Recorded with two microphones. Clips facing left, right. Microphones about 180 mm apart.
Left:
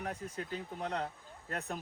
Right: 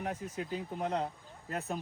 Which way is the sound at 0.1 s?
10° right (ahead or behind).